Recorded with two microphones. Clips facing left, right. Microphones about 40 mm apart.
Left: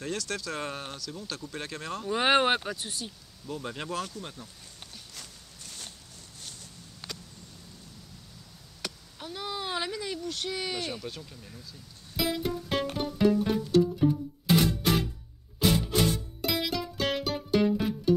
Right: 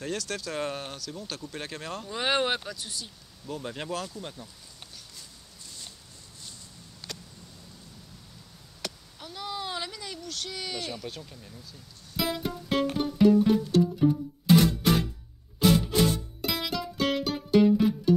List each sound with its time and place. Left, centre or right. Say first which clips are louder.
0.0 s speech: right 1 dB; centre
2.0 s speech: left 4 dB; centre
3.4 s speech: right 1 dB; centre
7.1 s a sound: right 1 dB; centre
8.8 s a sound: right 1 dB; centre
9.2 s a sound: even; centre
10.2 s speech: left 3 dB; left
10.8 s speech: left 1 dB; centre
12.2 s music: left 1 dB; centre